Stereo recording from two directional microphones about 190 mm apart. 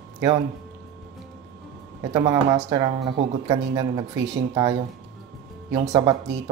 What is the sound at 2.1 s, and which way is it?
Speech, 20° right (ahead or behind).